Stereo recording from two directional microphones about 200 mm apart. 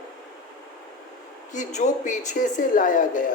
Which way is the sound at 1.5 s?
35° left (ahead or behind).